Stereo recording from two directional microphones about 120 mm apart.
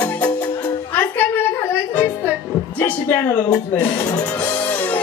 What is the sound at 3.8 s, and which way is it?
Speech, 35° left (ahead or behind).